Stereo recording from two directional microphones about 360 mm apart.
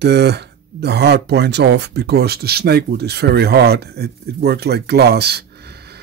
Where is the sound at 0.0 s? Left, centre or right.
Right.